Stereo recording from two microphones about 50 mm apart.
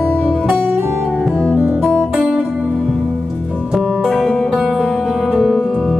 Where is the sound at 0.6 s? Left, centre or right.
Right.